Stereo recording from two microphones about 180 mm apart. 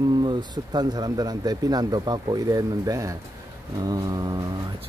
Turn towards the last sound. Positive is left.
turn(degrees=-20)  # may be behind; listen again after turning